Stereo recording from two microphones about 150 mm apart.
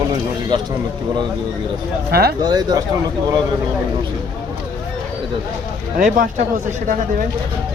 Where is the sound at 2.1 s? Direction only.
90° right.